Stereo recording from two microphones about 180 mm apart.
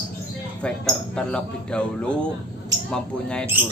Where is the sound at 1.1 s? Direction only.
5° left (ahead or behind).